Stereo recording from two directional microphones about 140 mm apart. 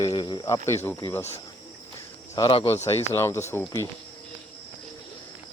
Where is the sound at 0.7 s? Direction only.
20° left (ahead or behind).